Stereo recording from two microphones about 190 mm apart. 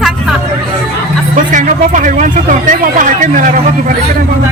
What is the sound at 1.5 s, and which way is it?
Speech, 40° right (ahead or behind).